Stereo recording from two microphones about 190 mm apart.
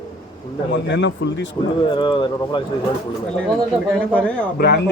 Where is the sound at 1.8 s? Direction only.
25° left (ahead or behind).